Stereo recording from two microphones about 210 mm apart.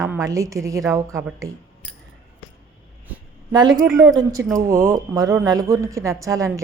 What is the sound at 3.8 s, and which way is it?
Speech, 5° right (ahead or behind).